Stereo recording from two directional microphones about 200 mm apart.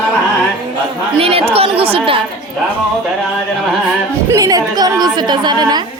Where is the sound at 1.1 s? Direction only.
30° right (ahead or behind).